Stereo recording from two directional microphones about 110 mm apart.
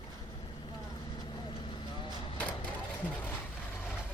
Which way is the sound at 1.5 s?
55° left (ahead or behind).